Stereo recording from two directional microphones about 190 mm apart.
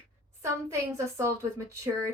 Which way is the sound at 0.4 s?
15° right (ahead or behind).